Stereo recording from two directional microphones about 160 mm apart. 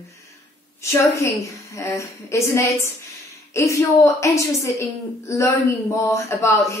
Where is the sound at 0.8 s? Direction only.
20° left (ahead or behind).